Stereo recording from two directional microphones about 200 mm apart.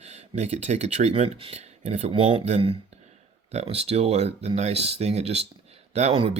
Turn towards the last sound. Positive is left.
turn(degrees=-30)  # may be behind; listen again after turning